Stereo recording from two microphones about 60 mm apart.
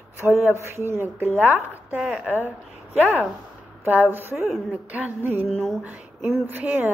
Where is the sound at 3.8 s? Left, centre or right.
Right.